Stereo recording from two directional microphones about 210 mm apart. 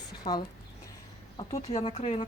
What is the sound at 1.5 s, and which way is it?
Speech, 30° left (ahead or behind).